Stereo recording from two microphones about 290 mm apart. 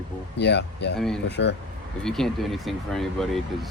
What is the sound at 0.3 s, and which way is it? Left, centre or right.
Speech, left.